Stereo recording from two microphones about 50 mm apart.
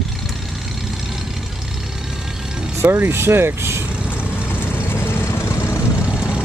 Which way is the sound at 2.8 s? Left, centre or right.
Right.